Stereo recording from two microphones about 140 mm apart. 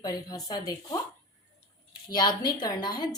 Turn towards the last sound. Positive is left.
turn(degrees=30)  # may be behind; listen again after turning